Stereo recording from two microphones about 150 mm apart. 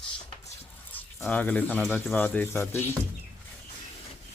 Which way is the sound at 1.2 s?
10° left (ahead or behind).